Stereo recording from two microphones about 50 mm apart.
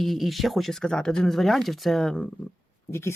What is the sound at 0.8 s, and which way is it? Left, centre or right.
Speech, centre.